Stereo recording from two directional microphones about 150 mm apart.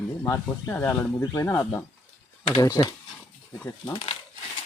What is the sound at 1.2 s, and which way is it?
Speech, 30° left (ahead or behind).